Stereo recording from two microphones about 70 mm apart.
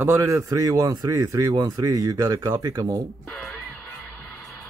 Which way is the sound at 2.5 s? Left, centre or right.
Right.